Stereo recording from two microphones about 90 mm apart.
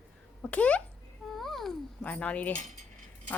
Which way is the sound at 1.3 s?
Centre (ahead or behind).